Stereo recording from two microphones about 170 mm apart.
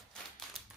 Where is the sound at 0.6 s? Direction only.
Centre (ahead or behind).